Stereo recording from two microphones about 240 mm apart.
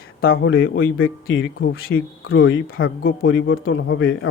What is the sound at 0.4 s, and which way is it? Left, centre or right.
Speech, left.